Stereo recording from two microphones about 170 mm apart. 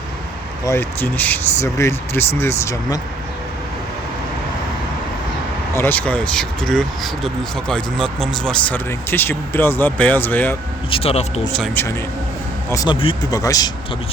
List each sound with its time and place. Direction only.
0.6 s speech: 15° left (ahead or behind)
5.7 s speech: 10° left (ahead or behind)
10.9 s speech: 35° left (ahead or behind)
11.5 s speech: 10° left (ahead or behind)
12.7 s speech: 25° left (ahead or behind)